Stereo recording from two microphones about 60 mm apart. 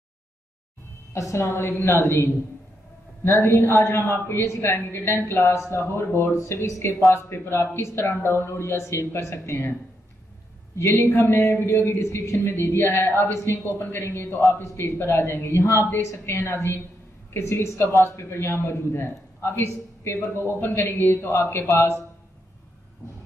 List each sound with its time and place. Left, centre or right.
1.1 s speech: left
11.0 s speech: left
13.7 s a man's voice: left
21.6 s speech: left